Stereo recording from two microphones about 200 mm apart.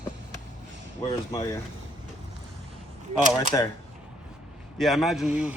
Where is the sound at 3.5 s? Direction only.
15° left (ahead or behind).